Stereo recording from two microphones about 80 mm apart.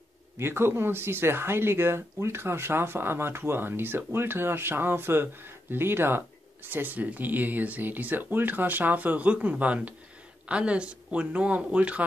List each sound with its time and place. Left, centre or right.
0.4 s speech: right